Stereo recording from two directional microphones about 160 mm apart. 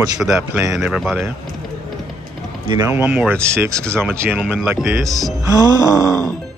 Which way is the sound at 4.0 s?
15° right (ahead or behind).